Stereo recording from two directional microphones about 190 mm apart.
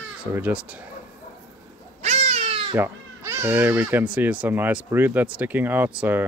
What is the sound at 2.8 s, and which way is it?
Speech, 10° right (ahead or behind).